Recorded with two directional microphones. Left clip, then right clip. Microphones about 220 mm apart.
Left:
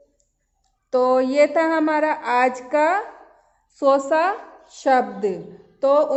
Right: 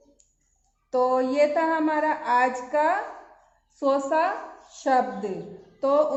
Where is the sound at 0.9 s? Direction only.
50° left (ahead or behind).